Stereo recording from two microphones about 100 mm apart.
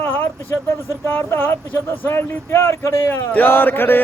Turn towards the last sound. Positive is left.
turn(degrees=20)  # may be behind; listen again after turning